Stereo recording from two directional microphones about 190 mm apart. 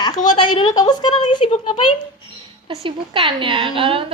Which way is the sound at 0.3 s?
25° left (ahead or behind).